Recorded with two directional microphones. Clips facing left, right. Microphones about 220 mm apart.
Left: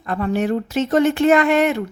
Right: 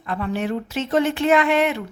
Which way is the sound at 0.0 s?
45° left (ahead or behind).